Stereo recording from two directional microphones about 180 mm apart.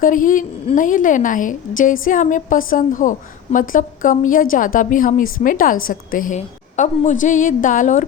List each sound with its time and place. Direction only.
0.0 s a woman's voice: 50° left (ahead or behind)